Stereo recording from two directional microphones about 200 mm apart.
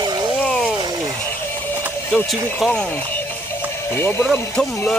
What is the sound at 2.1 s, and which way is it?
Speech, 5° left (ahead or behind).